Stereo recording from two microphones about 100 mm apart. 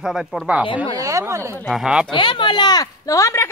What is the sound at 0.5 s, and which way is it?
Speech, 10° right (ahead or behind).